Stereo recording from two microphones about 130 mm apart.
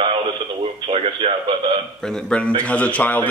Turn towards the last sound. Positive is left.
turn(degrees=10)  # may be behind; listen again after turning